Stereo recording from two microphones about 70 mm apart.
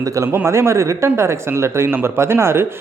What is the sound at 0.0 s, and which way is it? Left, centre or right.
Speech, right.